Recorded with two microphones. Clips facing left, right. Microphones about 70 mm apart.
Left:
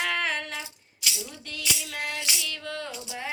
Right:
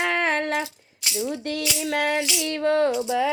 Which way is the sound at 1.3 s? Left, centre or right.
Right.